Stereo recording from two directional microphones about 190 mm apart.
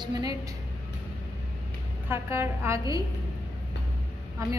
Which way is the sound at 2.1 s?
15° right (ahead or behind).